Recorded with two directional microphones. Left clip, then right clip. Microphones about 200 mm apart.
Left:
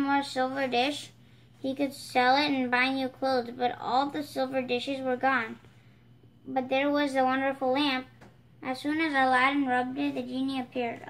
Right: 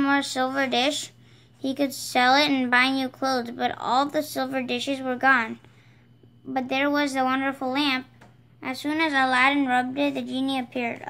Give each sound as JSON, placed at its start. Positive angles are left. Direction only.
{"t": 0.0, "sound": "a woman's voice", "side_deg": -40}
{"t": 6.5, "sound": "a woman's voice", "side_deg": -45}